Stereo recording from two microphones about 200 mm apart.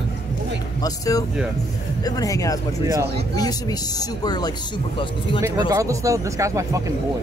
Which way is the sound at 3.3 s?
20° left (ahead or behind).